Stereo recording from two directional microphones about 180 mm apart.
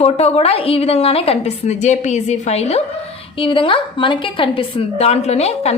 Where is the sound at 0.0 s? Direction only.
35° left (ahead or behind).